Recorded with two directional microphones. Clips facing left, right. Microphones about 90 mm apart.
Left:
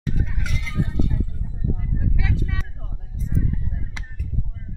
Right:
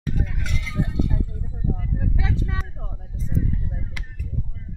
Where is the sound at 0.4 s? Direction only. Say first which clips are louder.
Even; centre (ahead or behind).